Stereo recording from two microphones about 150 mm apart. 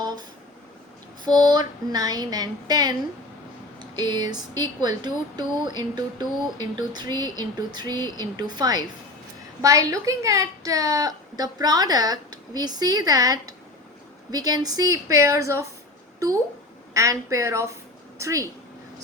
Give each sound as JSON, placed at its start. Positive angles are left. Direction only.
{"t": 1.2, "sound": "speech", "side_deg": -25}
{"t": 16.9, "sound": "speech", "side_deg": -20}